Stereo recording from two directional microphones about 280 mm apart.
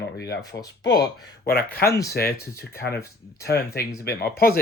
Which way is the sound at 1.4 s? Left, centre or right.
Left.